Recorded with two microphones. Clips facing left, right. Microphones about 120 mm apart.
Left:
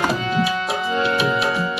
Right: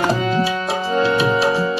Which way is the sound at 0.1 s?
35° right (ahead or behind).